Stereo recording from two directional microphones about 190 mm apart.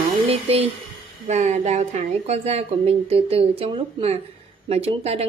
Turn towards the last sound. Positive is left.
turn(degrees=-30)  # may be behind; listen again after turning